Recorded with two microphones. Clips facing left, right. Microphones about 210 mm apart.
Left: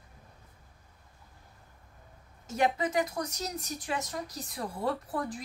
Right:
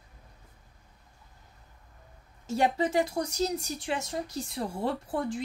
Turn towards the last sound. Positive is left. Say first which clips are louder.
# right 4 dB
turn(degrees=-25)  # may be behind; listen again after turning